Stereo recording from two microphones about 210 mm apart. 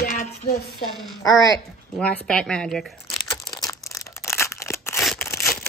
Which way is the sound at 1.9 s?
5° left (ahead or behind).